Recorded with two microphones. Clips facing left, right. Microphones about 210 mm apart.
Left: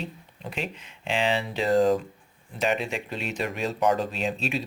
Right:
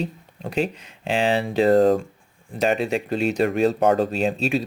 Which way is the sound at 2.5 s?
40° right (ahead or behind).